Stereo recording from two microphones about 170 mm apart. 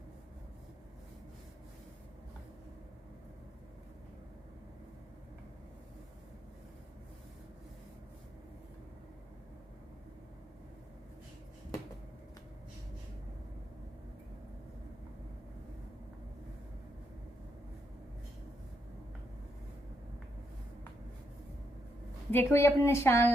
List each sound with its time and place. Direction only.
22.3 s a woman's voice: 15° left (ahead or behind)